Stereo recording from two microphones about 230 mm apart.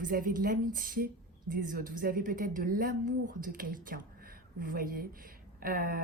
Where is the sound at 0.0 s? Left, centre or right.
Right.